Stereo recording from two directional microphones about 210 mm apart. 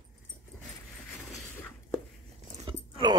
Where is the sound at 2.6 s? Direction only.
25° right (ahead or behind).